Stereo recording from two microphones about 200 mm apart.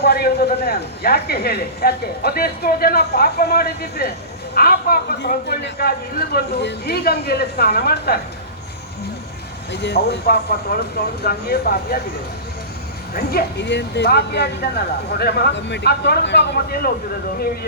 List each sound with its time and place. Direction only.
0.0 s speech: 55° left (ahead or behind)
9.7 s a man's voice: 55° left (ahead or behind)
13.1 s a man's voice: 55° left (ahead or behind)